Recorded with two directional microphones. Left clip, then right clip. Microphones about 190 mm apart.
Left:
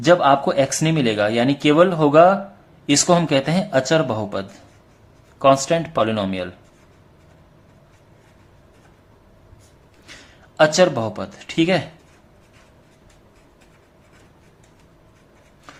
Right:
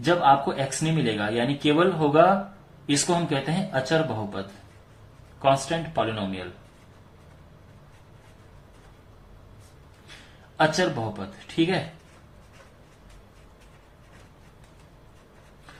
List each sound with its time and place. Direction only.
0.0 s speech: 50° left (ahead or behind)
10.6 s speech: 50° left (ahead or behind)